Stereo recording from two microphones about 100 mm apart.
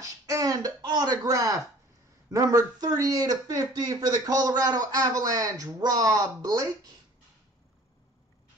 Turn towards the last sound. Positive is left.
turn(degrees=-40)  # may be behind; listen again after turning